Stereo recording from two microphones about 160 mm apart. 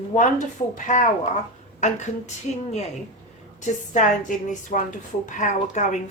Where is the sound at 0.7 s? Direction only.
50° left (ahead or behind).